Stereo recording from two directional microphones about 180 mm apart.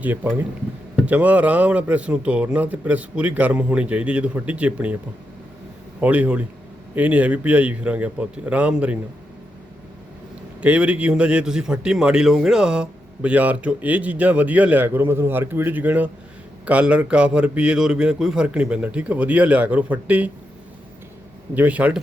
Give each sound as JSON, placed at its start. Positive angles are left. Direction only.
{"t": 0.0, "sound": "a man's voice", "side_deg": -10}
{"t": 6.0, "sound": "a man's voice", "side_deg": -10}
{"t": 10.6, "sound": "a man's voice", "side_deg": -5}
{"t": 21.5, "sound": "a man's voice", "side_deg": -10}